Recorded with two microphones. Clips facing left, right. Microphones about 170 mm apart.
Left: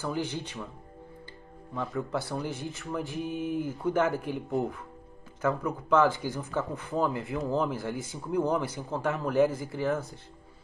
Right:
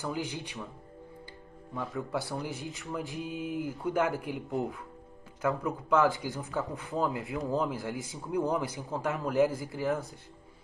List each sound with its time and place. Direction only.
0.0 s speech: 15° right (ahead or behind)
1.8 s speech: 15° right (ahead or behind)